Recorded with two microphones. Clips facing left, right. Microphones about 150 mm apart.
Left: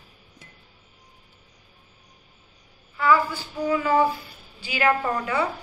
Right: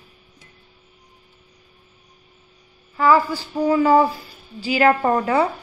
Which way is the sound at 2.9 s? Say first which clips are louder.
Right 4 dB; 40° right (ahead or behind).